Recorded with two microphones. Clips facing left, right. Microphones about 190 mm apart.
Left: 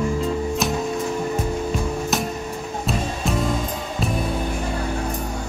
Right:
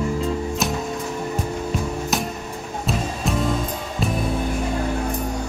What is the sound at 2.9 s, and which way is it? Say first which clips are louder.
Music: even; centre (ahead or behind).